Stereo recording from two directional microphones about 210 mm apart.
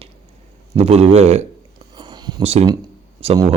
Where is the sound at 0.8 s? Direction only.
30° right (ahead or behind).